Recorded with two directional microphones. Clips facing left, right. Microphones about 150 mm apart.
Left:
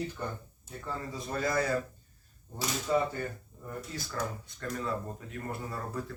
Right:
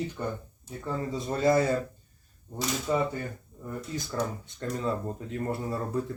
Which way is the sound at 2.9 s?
15° right (ahead or behind).